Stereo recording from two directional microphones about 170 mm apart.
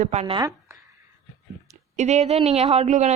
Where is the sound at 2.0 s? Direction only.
40° right (ahead or behind).